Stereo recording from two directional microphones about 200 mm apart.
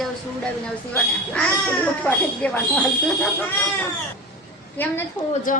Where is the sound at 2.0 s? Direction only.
5° left (ahead or behind).